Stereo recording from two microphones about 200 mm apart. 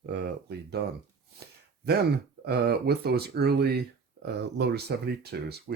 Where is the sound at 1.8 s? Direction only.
55° right (ahead or behind).